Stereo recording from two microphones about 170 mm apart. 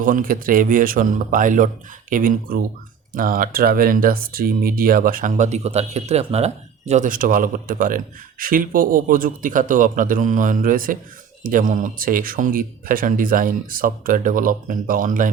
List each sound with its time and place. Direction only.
0.0 s speech: 55° right (ahead or behind)